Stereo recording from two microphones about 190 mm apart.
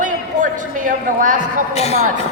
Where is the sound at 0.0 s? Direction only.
45° right (ahead or behind).